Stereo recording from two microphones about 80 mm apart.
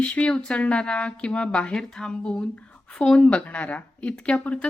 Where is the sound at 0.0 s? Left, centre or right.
Centre.